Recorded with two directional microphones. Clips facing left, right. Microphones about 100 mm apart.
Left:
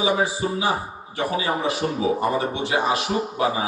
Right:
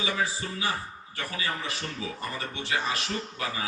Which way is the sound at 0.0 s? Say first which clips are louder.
Left 9 dB; 15° left (ahead or behind).